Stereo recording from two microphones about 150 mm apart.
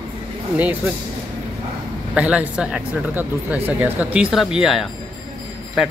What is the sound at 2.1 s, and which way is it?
Speech, 10° right (ahead or behind).